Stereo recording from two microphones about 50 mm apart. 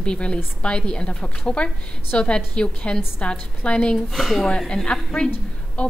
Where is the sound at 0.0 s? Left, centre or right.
Centre.